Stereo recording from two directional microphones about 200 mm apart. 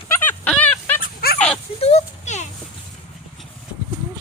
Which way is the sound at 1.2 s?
50° left (ahead or behind).